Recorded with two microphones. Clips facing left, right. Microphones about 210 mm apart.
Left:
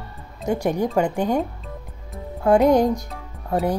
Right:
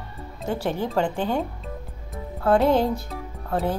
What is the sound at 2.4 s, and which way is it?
Speech, 15° left (ahead or behind).